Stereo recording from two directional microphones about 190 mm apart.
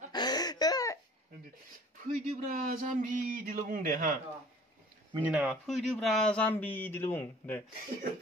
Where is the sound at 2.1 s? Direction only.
45° right (ahead or behind).